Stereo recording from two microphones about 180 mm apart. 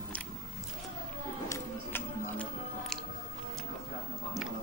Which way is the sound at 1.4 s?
15° left (ahead or behind).